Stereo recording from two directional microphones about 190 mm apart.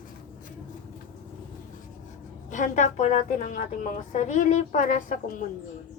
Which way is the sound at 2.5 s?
40° left (ahead or behind).